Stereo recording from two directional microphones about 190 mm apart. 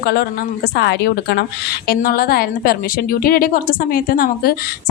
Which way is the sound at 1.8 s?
50° left (ahead or behind).